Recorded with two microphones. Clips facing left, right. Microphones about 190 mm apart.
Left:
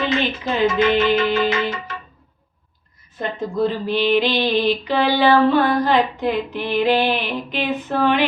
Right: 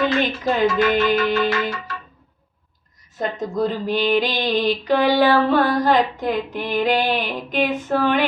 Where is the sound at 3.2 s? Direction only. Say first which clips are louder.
Left 1 dB; 45° right (ahead or behind).